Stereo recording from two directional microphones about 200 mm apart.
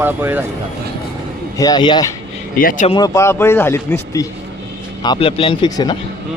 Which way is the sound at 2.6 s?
40° left (ahead or behind).